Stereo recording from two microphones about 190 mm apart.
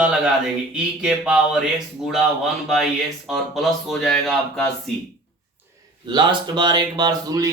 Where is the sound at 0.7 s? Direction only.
5° right (ahead or behind).